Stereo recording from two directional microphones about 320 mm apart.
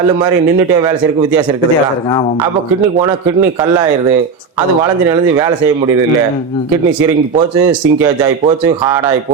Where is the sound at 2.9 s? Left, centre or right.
Centre.